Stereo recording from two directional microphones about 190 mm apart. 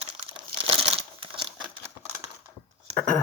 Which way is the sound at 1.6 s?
15° right (ahead or behind).